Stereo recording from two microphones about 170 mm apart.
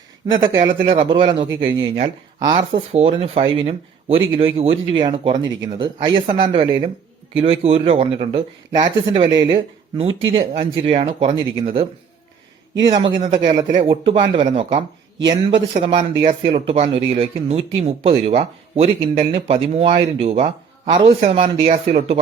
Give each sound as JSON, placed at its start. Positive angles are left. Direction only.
{"t": 0.4, "sound": "speech", "side_deg": -25}
{"t": 2.9, "sound": "speech", "side_deg": -35}
{"t": 12.9, "sound": "speech", "side_deg": -25}
{"t": 13.2, "sound": "speech", "side_deg": -40}